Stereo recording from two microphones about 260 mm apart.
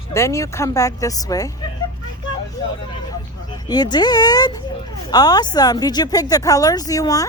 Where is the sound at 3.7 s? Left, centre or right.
Centre.